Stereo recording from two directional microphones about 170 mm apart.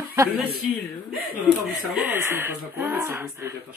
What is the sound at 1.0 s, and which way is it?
Speech, 5° right (ahead or behind).